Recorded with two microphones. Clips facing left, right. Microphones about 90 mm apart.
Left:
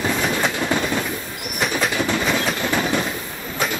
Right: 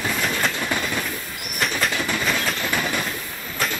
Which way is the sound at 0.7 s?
25° left (ahead or behind).